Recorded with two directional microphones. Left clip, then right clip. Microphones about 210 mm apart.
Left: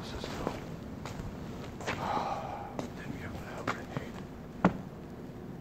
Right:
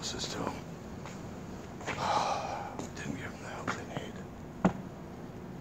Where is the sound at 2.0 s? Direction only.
45° right (ahead or behind).